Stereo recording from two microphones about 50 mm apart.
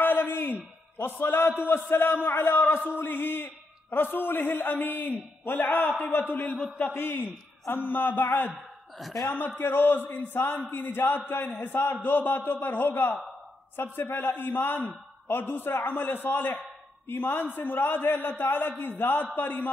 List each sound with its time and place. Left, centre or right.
0.0 s a sound: left
1.6 s a man's voice: left
9.6 s a man's voice: left